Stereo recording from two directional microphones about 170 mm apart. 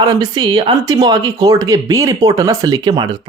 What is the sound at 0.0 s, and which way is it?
Speech, 20° right (ahead or behind).